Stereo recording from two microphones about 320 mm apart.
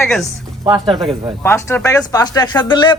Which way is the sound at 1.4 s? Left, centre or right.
Centre.